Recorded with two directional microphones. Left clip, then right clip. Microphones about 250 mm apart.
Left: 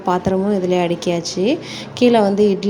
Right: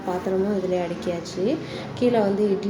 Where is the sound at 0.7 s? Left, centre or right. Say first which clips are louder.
Left 8 dB; left.